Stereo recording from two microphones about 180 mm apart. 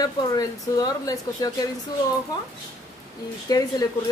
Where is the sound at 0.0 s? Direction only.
20° left (ahead or behind).